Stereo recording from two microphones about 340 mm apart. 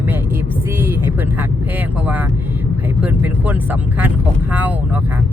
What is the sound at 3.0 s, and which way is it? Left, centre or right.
Speech, centre.